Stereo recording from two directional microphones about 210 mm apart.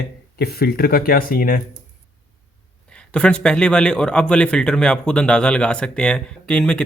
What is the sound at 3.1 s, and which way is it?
A man's voice, 5° left (ahead or behind).